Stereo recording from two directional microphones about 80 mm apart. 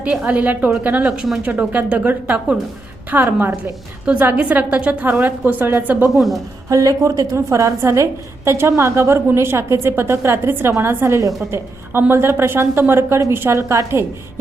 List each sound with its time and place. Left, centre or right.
0.0 s a woman's voice: centre
6.1 s a woman's voice: centre
6.7 s a woman's voice: right
11.9 s a woman's voice: right